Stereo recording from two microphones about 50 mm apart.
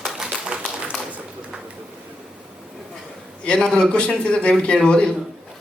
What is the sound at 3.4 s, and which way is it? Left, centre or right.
A man's voice, centre.